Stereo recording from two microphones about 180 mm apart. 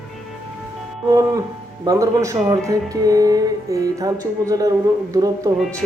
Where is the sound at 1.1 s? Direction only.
20° right (ahead or behind).